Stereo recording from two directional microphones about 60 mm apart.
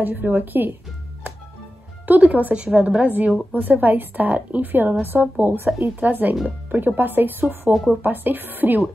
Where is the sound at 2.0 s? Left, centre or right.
Right.